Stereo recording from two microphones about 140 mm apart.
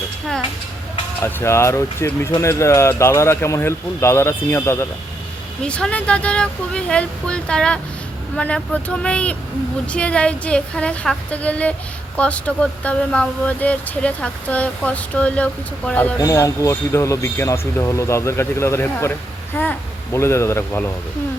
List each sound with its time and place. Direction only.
1.2 s speech: 20° left (ahead or behind)
5.6 s speech: 5° left (ahead or behind)
16.2 s speech: 25° left (ahead or behind)